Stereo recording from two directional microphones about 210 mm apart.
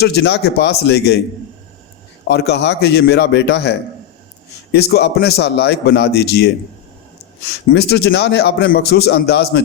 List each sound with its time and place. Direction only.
0.0 s a man's voice: 50° left (ahead or behind)
2.2 s a man's voice: 50° left (ahead or behind)
7.7 s a man's voice: 50° left (ahead or behind)